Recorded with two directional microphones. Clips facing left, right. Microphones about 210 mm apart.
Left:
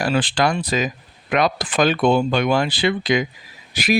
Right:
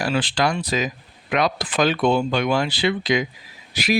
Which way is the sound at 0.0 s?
50° left (ahead or behind).